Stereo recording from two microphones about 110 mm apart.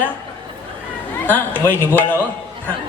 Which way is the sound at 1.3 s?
15° left (ahead or behind).